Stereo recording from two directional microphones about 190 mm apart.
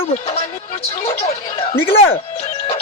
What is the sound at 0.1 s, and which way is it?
Speech, 35° left (ahead or behind).